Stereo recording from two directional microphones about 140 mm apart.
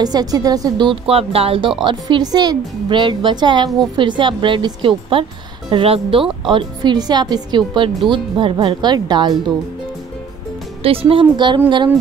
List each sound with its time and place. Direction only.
0.0 s speech: 30° right (ahead or behind)
1.9 s speech: 35° right (ahead or behind)
10.8 s speech: 40° right (ahead or behind)